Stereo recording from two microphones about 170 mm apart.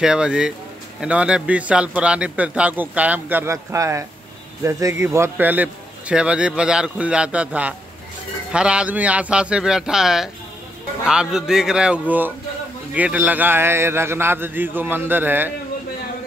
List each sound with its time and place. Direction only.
0.0 s a man's voice: 5° right (ahead or behind)